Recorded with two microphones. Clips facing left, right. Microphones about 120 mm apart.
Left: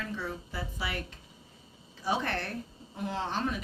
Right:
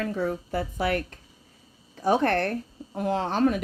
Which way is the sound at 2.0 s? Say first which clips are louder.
Right 9 dB; 55° right (ahead or behind).